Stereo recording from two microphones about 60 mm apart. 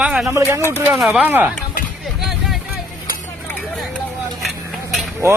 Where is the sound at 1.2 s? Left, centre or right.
Right.